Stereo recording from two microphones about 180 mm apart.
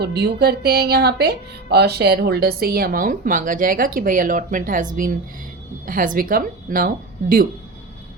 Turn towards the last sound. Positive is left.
turn(degrees=-50)  # may be behind; listen again after turning